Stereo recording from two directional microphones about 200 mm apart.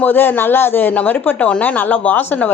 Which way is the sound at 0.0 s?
10° left (ahead or behind).